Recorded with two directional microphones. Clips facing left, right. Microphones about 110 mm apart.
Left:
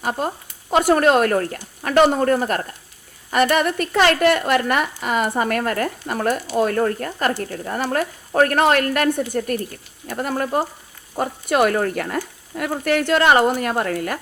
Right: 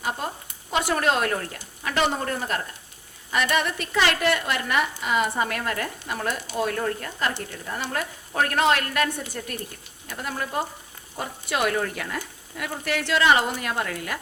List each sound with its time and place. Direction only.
0.7 s a woman's voice: 45° left (ahead or behind)